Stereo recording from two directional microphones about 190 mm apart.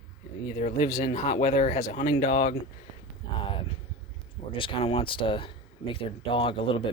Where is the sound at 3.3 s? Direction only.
25° left (ahead or behind).